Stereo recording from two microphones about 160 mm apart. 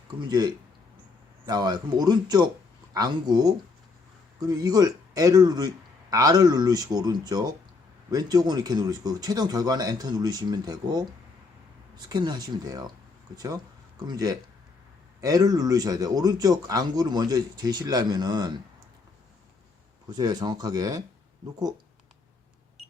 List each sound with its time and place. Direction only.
0.2 s speech: 25° right (ahead or behind)
12.0 s speech: 25° right (ahead or behind)
20.1 s speech: 25° right (ahead or behind)